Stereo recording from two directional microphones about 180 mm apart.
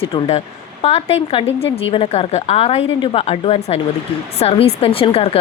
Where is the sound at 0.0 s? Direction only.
35° left (ahead or behind).